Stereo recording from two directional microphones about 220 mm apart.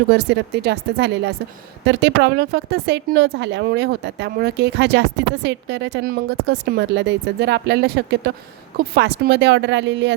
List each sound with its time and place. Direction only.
0.1 s a woman's voice: 50° right (ahead or behind)